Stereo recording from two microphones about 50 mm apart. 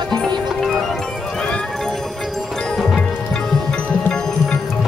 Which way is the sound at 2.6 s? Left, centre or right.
Centre.